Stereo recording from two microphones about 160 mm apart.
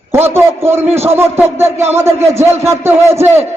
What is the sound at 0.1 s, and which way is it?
A man's voice, 15° right (ahead or behind).